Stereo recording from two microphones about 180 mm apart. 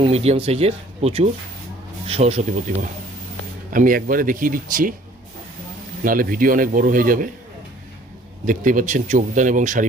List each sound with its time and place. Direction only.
0.0 s speech: 35° right (ahead or behind)
3.7 s speech: 50° right (ahead or behind)
6.1 s speech: 50° right (ahead or behind)
8.4 s speech: 45° right (ahead or behind)